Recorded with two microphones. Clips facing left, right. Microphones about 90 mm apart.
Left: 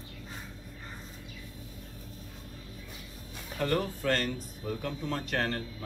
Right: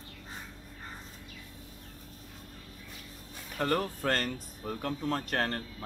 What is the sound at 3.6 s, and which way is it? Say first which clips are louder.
Speech: even; 40° right (ahead or behind).